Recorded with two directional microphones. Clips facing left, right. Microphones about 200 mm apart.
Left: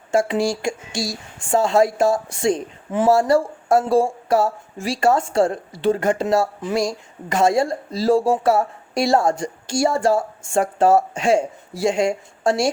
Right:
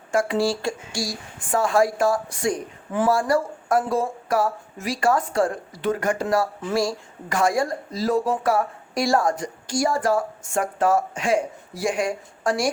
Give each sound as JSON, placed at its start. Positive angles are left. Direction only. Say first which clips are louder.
{"t": 0.1, "sound": "speech", "louder": "left 2 dB", "side_deg": 25}